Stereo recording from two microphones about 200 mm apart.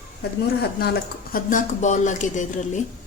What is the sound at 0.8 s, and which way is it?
A woman's voice, 50° left (ahead or behind).